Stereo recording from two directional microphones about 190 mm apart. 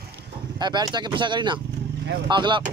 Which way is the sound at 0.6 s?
20° right (ahead or behind).